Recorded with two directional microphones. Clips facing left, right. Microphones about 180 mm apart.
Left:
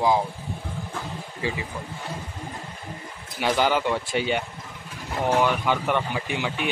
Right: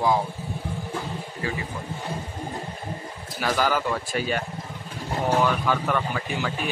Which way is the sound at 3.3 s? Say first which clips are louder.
Left 2 dB; 20° left (ahead or behind).